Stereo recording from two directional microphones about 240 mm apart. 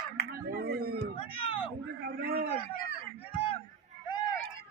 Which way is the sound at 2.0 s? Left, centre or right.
Right.